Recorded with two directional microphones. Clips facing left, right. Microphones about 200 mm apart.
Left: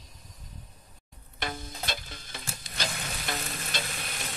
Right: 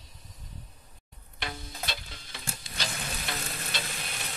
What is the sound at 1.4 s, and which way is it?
Music, 45° left (ahead or behind).